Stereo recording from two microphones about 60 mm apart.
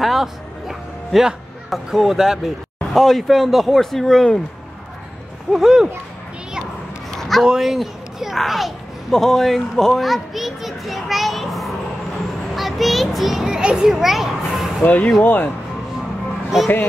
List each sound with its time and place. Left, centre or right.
0.0 s speech: centre
5.5 s speech: centre
7.1 s a sound: centre
7.4 s a child's voice: centre
14.9 s speech: left